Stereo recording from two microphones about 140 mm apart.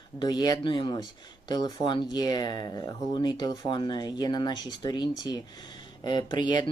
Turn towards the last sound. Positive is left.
turn(degrees=30)  # may be behind; listen again after turning